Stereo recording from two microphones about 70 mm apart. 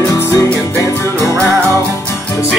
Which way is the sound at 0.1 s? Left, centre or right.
Left.